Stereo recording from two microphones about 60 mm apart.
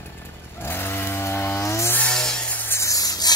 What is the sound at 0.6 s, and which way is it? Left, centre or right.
Chainsaw, left.